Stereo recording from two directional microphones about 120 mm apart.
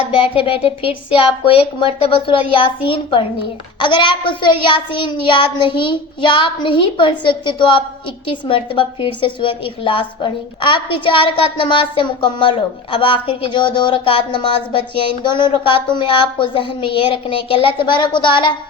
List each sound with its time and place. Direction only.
0.1 s a woman's voice: 45° left (ahead or behind)